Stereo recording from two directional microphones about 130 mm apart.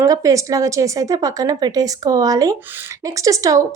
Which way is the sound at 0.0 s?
25° right (ahead or behind).